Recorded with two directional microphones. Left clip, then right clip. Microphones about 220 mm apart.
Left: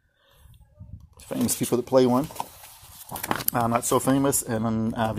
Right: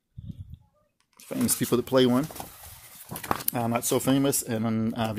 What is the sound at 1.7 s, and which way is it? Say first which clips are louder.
Speech: left 2 dB; 10° right (ahead or behind).